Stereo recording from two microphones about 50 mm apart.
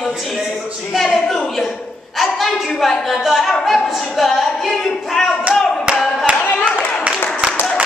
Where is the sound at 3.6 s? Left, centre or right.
Centre.